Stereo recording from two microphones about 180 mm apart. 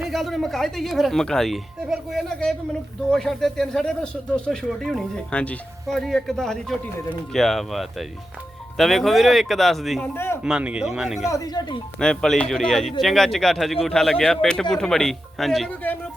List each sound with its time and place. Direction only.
0.0 s speech: centre (ahead or behind)
11.3 s speech: 20° left (ahead or behind)
11.9 s speech: 5° left (ahead or behind)